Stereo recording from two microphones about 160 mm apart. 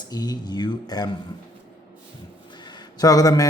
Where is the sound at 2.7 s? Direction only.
25° left (ahead or behind).